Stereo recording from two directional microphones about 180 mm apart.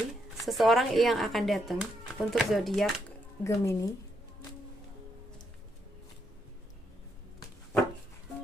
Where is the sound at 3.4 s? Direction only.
15° left (ahead or behind).